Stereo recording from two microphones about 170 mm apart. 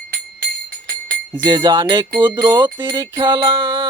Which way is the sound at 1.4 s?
25° right (ahead or behind).